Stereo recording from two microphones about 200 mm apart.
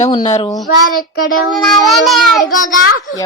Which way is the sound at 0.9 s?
45° left (ahead or behind).